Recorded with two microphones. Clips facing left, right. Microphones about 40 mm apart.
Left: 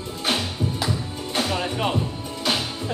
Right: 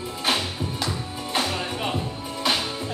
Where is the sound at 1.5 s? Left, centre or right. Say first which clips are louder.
Left 3 dB; centre.